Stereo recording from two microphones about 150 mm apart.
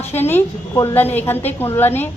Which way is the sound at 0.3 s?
15° left (ahead or behind).